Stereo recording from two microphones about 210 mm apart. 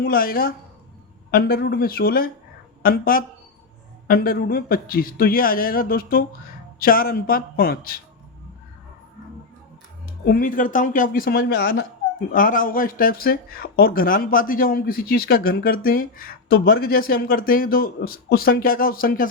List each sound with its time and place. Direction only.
0.0 s speech: 45° left (ahead or behind)
10.2 s speech: 45° left (ahead or behind)